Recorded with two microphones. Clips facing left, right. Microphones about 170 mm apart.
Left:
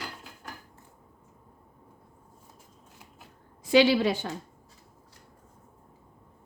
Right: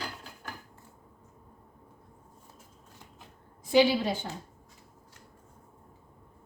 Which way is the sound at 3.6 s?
80° left.